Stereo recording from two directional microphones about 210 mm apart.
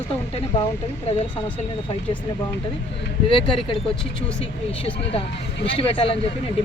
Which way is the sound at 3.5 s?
25° left (ahead or behind).